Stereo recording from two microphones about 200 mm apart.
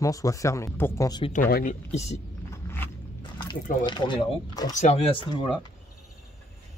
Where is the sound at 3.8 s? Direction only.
25° left (ahead or behind).